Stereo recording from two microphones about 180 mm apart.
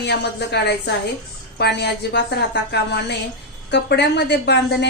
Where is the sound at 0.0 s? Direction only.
70° left (ahead or behind).